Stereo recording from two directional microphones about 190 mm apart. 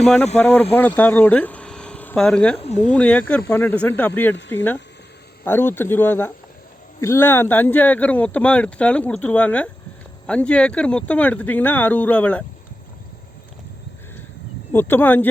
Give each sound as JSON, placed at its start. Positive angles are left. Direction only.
{"t": 0.0, "sound": "speech", "side_deg": 5}
{"t": 2.6, "sound": "speech", "side_deg": 35}
{"t": 2.9, "sound": "speech", "side_deg": 5}
{"t": 4.4, "sound": "speech", "side_deg": 70}
{"t": 5.5, "sound": "speech", "side_deg": 10}
{"t": 14.7, "sound": "speech", "side_deg": 10}